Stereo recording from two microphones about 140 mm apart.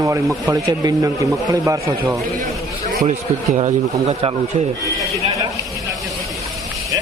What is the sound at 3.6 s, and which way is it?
Speech, 45° right (ahead or behind).